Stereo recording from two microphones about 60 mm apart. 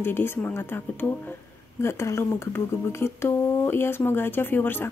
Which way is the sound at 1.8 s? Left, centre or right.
Left.